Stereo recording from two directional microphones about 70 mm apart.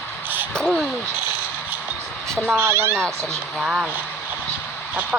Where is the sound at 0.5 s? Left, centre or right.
Centre.